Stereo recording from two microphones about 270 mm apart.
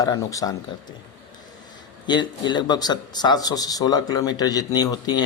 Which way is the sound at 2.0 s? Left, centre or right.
Centre.